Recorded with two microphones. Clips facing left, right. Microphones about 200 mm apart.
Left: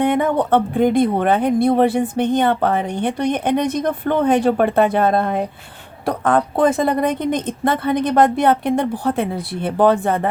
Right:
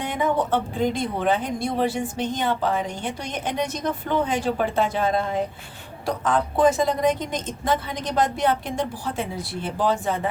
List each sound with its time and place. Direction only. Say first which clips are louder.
0.0 s speech: left 7 dB; 60° left (ahead or behind)